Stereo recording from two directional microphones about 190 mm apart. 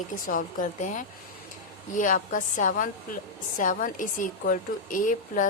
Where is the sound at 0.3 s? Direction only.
45° left (ahead or behind).